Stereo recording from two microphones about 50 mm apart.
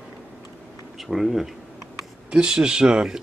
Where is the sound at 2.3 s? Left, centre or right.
Centre.